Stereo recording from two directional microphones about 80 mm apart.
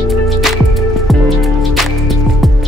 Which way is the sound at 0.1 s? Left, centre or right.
Centre.